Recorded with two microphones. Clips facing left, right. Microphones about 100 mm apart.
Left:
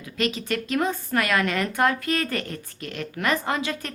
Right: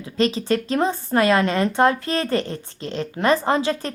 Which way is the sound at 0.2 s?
30° right (ahead or behind).